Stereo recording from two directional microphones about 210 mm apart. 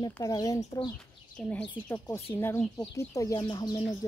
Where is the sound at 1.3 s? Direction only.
5° left (ahead or behind).